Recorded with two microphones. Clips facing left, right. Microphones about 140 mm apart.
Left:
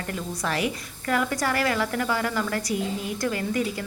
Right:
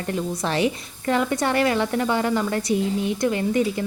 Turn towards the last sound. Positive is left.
turn(degrees=-25)  # may be behind; listen again after turning